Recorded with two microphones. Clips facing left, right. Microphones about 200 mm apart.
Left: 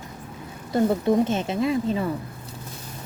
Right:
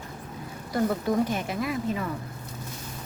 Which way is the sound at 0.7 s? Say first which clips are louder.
Left 5 dB; 25° left (ahead or behind).